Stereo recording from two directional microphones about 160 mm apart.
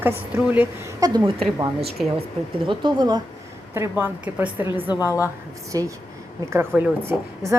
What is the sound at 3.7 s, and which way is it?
Speech, 15° right (ahead or behind).